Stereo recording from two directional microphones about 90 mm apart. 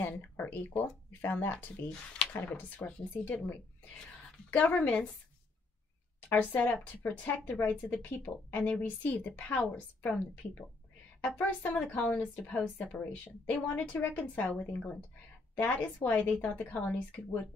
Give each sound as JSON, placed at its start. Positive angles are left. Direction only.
{"t": 0.0, "sound": "speech", "side_deg": 20}
{"t": 4.5, "sound": "a woman's voice", "side_deg": 15}
{"t": 6.2, "sound": "a woman's voice", "side_deg": 20}